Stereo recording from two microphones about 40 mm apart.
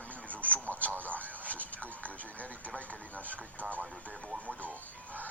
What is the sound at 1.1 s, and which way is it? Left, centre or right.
Speech, left.